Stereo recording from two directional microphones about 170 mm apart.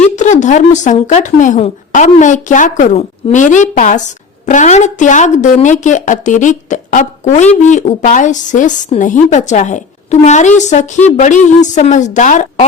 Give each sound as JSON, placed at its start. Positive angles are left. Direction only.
{"t": 0.0, "sound": "a woman's voice", "side_deg": 45}